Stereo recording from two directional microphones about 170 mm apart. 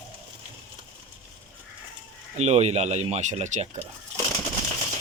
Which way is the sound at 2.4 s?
40° right (ahead or behind).